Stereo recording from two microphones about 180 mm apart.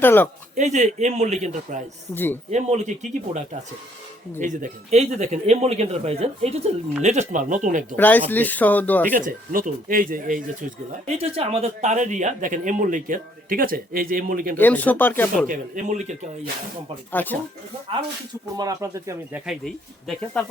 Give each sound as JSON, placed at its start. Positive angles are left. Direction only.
{"t": 0.0, "sound": "speech", "side_deg": 10}
{"t": 0.5, "sound": "a man's voice", "side_deg": -40}
{"t": 2.1, "sound": "speech", "side_deg": 10}
{"t": 2.5, "sound": "a man's voice", "side_deg": -40}
{"t": 7.9, "sound": "speech", "side_deg": 10}
{"t": 9.2, "sound": "speech", "side_deg": -50}
{"t": 14.6, "sound": "speech", "side_deg": 10}
{"t": 15.4, "sound": "a man's voice", "side_deg": -40}
{"t": 17.1, "sound": "speech", "side_deg": 10}
{"t": 18.5, "sound": "speech", "side_deg": -20}
{"t": 19.5, "sound": "speech", "side_deg": 0}